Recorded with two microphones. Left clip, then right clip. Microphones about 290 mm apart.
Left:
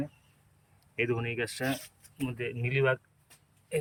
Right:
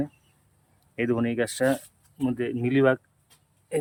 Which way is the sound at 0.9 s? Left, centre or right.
Centre.